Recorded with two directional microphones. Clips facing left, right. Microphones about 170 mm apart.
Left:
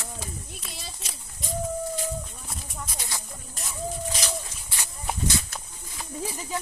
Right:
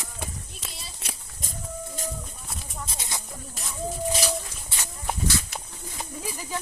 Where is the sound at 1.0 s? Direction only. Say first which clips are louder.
Right 1 dB; 55° right (ahead or behind).